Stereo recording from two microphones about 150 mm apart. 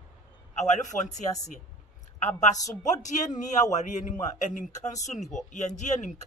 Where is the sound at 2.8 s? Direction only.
55° left (ahead or behind).